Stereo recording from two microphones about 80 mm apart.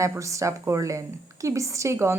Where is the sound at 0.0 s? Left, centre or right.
Right.